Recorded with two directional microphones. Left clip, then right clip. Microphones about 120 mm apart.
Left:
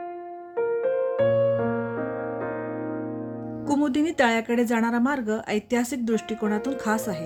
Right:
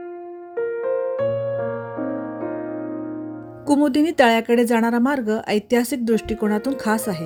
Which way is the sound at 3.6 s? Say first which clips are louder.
Right 6 dB; 50° right (ahead or behind).